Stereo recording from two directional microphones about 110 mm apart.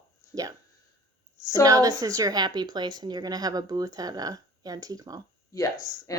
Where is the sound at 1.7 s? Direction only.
35° right (ahead or behind).